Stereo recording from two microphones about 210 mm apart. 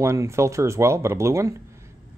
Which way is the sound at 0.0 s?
15° right (ahead or behind).